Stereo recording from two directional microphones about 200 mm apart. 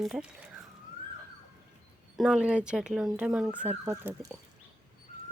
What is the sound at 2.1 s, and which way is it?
Speech, 5° right (ahead or behind).